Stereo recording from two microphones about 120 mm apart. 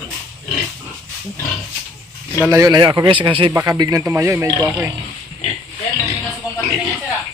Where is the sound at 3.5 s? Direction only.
30° right (ahead or behind).